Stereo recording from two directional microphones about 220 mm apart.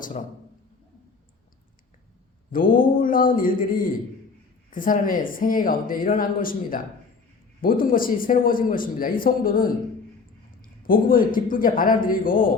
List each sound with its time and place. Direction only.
2.5 s a man's voice: 40° left (ahead or behind)
10.8 s a man's voice: 40° left (ahead or behind)